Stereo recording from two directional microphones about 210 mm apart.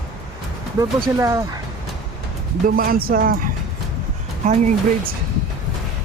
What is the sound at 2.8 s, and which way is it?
Speech, 45° right (ahead or behind).